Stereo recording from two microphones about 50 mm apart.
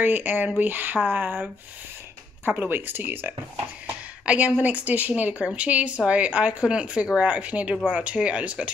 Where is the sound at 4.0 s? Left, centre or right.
Right.